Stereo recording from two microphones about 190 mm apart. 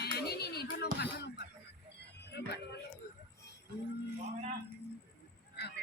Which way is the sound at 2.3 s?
60° left (ahead or behind).